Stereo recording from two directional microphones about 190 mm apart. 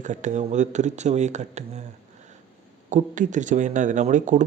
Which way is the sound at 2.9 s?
40° right (ahead or behind).